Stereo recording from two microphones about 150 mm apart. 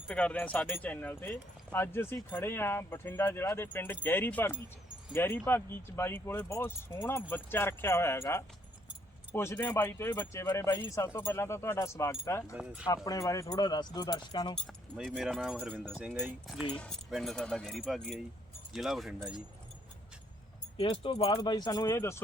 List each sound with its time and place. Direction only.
0.1 s speech: 10° left (ahead or behind); by 14.5 s 30° left (ahead or behind)
14.9 s speech: centre (ahead or behind)
16.7 s speech: 10° left (ahead or behind)
20.8 s speech: 35° left (ahead or behind)